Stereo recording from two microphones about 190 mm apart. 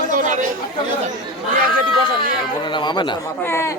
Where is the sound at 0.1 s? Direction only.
40° right (ahead or behind).